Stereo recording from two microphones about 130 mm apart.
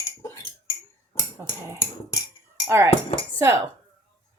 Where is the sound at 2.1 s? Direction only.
25° left (ahead or behind).